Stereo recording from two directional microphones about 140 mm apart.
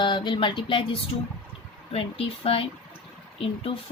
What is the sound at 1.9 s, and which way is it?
Speech, 45° left (ahead or behind).